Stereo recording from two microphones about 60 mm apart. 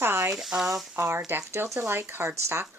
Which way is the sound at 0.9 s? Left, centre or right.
Right.